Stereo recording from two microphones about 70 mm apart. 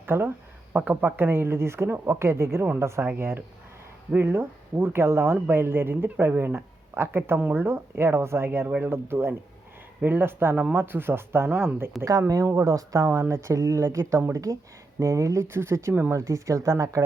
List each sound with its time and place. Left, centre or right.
0.0 s speech: right
12.5 s speech: right
16.1 s speech: right